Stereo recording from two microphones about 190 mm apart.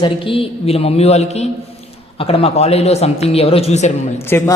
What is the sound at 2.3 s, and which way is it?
Speech, 30° left (ahead or behind).